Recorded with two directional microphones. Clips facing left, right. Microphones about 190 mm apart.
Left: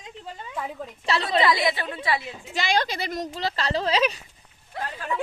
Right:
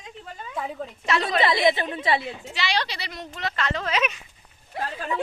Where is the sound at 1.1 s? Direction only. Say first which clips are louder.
Right 1 dB; 35° left (ahead or behind).